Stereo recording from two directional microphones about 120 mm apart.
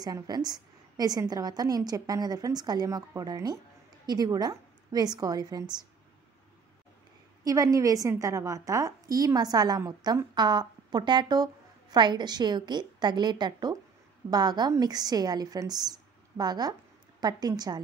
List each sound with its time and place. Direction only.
0.0 s a woman's voice: 35° right (ahead or behind)
7.4 s a woman's voice: 30° right (ahead or behind)